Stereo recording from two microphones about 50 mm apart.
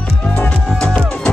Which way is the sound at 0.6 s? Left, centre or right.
Centre.